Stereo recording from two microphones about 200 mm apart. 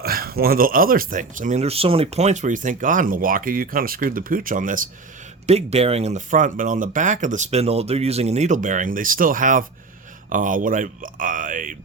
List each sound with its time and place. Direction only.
0.0 s speech: 50° right (ahead or behind)
5.5 s speech: 30° right (ahead or behind)